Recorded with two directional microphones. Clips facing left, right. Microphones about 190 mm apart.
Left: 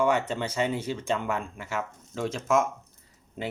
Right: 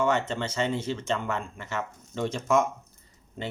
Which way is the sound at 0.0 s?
15° left (ahead or behind).